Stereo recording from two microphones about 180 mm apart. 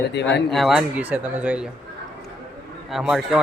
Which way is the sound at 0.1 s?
75° left (ahead or behind).